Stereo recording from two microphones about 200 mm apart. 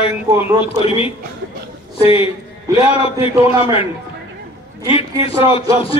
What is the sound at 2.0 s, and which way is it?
A man's voice, 25° left (ahead or behind).